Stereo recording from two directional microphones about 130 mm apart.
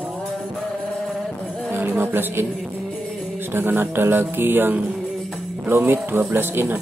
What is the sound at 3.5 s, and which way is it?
A man's voice, 15° right (ahead or behind).